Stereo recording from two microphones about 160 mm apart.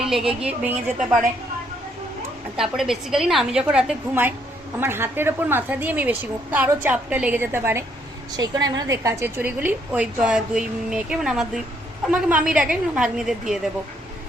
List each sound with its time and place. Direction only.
0.2 s a woman's voice: 35° right (ahead or behind)
0.4 s a woman's voice: 10° right (ahead or behind)
2.6 s a woman's voice: 5° right (ahead or behind)